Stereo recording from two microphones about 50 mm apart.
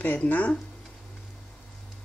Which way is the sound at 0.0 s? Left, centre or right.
Left.